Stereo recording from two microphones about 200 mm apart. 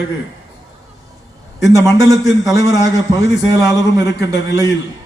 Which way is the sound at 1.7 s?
15° right (ahead or behind).